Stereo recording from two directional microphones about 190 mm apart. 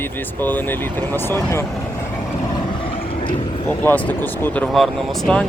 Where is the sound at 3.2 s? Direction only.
30° left (ahead or behind).